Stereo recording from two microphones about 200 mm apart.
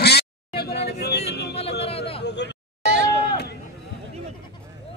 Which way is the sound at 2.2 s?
60° left (ahead or behind).